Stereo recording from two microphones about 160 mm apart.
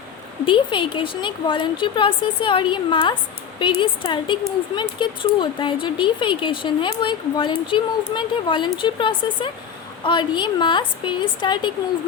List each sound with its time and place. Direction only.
0.4 s a woman's voice: 30° left (ahead or behind)